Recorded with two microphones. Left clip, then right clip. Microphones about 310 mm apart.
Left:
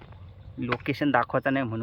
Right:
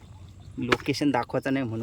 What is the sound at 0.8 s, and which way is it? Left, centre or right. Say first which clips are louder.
Speech: left 1 dB; centre.